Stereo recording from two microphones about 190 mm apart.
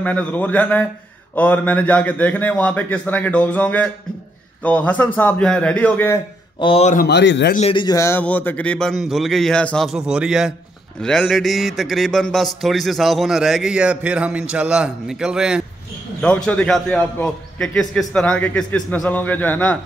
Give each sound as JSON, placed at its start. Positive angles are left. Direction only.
{"t": 0.0, "sound": "a man's voice", "side_deg": 10}
{"t": 6.6, "sound": "speech", "side_deg": 30}
{"t": 7.1, "sound": "speech", "side_deg": 65}
{"t": 7.7, "sound": "a man's voice", "side_deg": 20}